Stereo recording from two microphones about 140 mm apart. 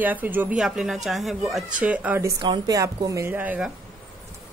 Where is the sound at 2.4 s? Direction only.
30° right (ahead or behind); by 3.7 s 10° right (ahead or behind).